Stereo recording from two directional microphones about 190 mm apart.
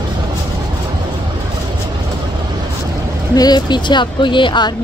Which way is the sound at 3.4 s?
20° left (ahead or behind).